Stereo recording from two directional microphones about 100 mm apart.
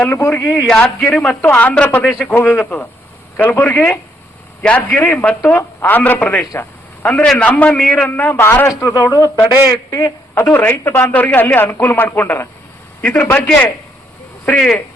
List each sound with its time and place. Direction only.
0.0 s speech: 25° left (ahead or behind)
0.5 s a man's voice: 10° left (ahead or behind)
3.6 s a man's voice: 20° left (ahead or behind)
6.4 s speech: 30° left (ahead or behind)
7.0 s a man's voice: 15° left (ahead or behind)
7.8 s speech: 5° left (ahead or behind); by 10.4 s 35° left (ahead or behind)
10.4 s a man's voice: 15° left (ahead or behind)